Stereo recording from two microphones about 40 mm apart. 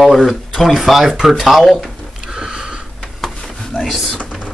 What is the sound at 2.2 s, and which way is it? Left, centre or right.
Sniff, centre.